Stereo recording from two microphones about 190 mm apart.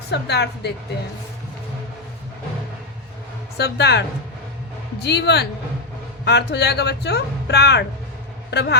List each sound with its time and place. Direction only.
0.1 s speech: 60° left (ahead or behind)
3.6 s speech: 60° left (ahead or behind)
5.0 s speech: 60° left (ahead or behind)